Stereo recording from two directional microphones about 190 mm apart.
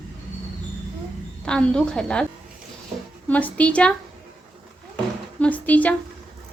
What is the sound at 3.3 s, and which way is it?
Speech, 10° left (ahead or behind).